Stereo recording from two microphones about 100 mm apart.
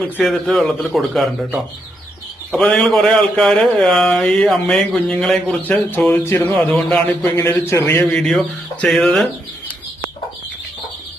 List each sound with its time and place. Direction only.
0.0 s speech: 5° left (ahead or behind)
2.6 s speech: 5° left (ahead or behind); by 8.0 s 25° left (ahead or behind)
8.1 s speech: 5° left (ahead or behind)